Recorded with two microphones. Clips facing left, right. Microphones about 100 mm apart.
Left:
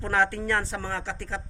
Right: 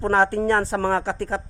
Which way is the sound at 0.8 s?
50° right (ahead or behind).